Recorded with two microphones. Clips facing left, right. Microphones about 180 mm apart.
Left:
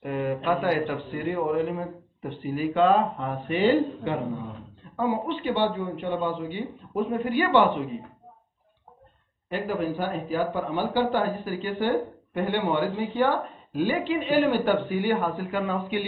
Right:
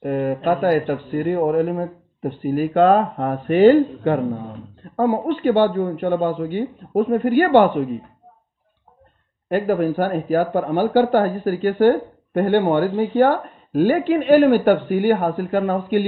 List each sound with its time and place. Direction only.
0.0 s speech: 50° right (ahead or behind)
9.5 s speech: 50° right (ahead or behind)